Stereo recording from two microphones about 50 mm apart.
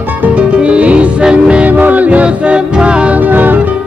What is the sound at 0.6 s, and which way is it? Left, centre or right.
Music, right.